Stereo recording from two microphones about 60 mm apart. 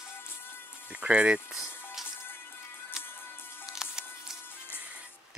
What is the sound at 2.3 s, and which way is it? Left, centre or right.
Music, left.